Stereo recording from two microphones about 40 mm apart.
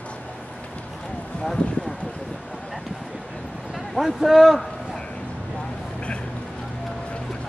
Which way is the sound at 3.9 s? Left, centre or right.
Centre.